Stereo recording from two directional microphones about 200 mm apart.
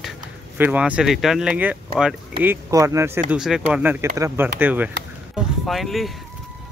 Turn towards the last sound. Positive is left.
turn(degrees=0)  # may be behind; listen again after turning